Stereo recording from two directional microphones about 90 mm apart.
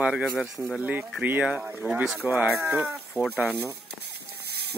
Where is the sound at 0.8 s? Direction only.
20° right (ahead or behind).